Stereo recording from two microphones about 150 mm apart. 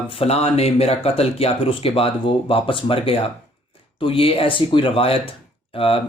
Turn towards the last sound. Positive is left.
turn(degrees=40)  # may be behind; listen again after turning